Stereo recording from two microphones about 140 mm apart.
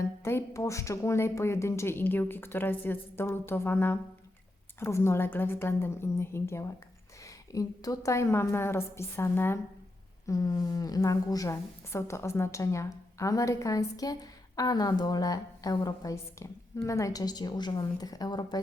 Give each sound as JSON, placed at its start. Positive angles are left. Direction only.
{"t": 0.3, "sound": "a woman's voice", "side_deg": 20}